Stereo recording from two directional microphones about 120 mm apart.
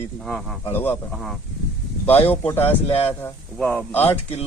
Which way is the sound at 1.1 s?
Centre (ahead or behind).